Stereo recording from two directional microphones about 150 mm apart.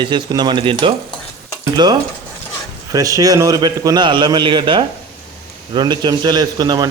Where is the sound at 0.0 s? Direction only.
30° right (ahead or behind).